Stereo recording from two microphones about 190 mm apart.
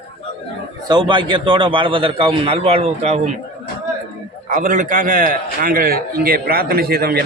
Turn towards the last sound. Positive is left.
turn(degrees=-55)  # may be behind; listen again after turning